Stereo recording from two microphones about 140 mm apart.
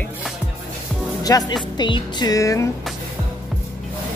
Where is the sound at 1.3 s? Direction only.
25° left (ahead or behind).